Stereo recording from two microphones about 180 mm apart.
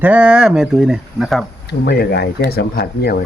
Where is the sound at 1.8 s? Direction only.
65° left (ahead or behind).